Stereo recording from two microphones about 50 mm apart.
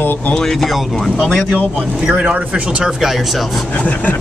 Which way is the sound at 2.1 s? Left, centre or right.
Right.